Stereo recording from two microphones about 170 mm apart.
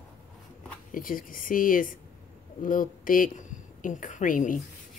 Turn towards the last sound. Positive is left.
turn(degrees=50)  # may be behind; listen again after turning